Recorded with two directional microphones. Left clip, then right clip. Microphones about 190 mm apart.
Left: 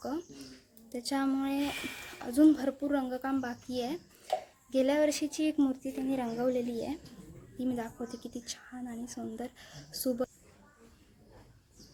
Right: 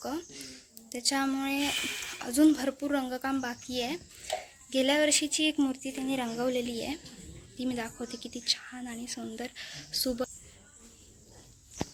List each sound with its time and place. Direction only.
0.0 s speech: centre (ahead or behind)